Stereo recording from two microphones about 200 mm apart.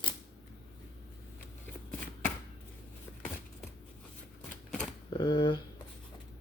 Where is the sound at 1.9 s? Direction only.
5° left (ahead or behind).